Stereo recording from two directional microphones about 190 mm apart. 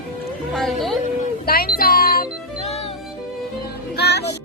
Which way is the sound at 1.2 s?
50° left (ahead or behind).